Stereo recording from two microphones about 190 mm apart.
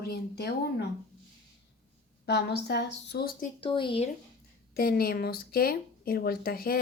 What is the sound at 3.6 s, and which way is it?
Speech, 25° left (ahead or behind).